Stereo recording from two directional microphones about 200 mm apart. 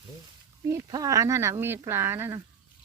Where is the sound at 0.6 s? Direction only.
15° right (ahead or behind).